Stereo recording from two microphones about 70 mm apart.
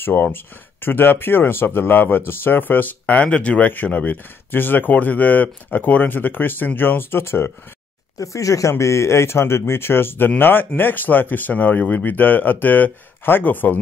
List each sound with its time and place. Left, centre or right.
0.0 s speech: left
8.2 s speech: left